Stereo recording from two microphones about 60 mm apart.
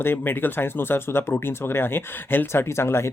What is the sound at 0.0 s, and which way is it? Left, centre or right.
Speech, left.